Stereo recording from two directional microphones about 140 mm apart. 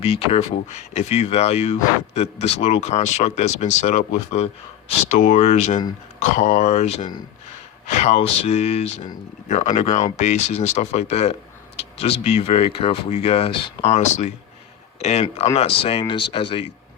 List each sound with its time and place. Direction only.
0.0 s speech: 45° left (ahead or behind)
13.9 s speech: 50° left (ahead or behind)